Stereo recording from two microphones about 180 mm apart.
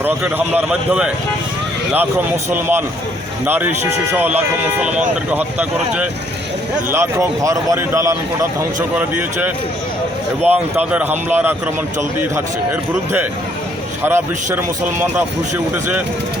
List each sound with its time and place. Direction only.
0.0 s speech: 10° right (ahead or behind)
10.4 s speech: 10° right (ahead or behind)
14.0 s speech: 10° right (ahead or behind)